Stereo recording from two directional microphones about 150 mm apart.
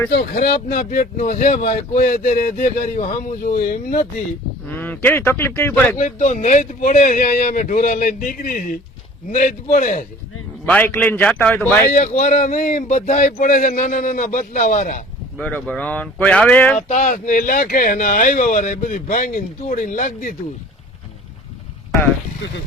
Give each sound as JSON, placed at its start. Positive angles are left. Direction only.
{"t": 0.2, "sound": "speech", "side_deg": 90}
{"t": 4.7, "sound": "speech", "side_deg": 10}
{"t": 6.0, "sound": "speech", "side_deg": 55}
{"t": 10.7, "sound": "speech", "side_deg": 10}
{"t": 11.9, "sound": "speech", "side_deg": 55}
{"t": 15.4, "sound": "speech", "side_deg": 10}
{"t": 16.7, "sound": "speech", "side_deg": 55}